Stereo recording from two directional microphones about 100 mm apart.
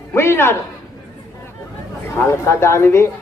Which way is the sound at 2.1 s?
25° left (ahead or behind).